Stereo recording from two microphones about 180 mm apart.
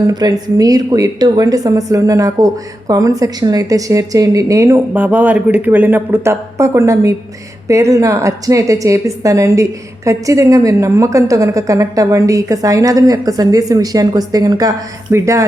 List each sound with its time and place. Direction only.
0.1 s a woman's voice: 20° right (ahead or behind)